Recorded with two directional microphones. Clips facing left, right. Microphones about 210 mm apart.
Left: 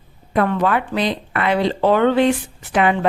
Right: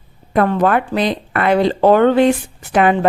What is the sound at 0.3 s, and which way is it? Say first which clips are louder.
A woman's voice: right 3 dB; 40° right (ahead or behind).